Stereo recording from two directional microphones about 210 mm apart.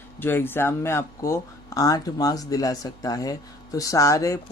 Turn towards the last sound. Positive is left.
turn(degrees=15)  # may be behind; listen again after turning